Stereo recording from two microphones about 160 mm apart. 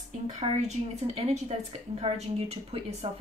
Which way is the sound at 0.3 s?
45° right (ahead or behind).